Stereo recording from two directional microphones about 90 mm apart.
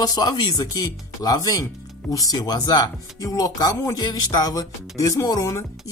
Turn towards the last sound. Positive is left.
turn(degrees=30)  # may be behind; listen again after turning